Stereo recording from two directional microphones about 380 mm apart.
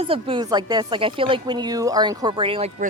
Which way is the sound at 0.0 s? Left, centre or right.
Centre.